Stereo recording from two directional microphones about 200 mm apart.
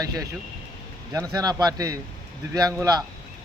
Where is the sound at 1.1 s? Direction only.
15° right (ahead or behind).